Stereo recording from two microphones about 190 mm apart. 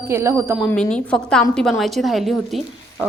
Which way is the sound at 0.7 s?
5° left (ahead or behind).